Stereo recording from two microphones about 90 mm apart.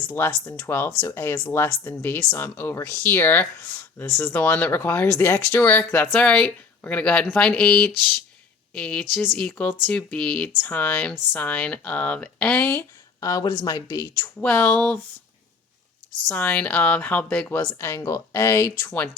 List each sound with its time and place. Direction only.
0.4 s speech: 25° left (ahead or behind)
13.1 s speech: 40° left (ahead or behind)
14.3 s speech: 20° left (ahead or behind)
16.3 s speech: 15° left (ahead or behind)
17.6 s speech: 30° left (ahead or behind)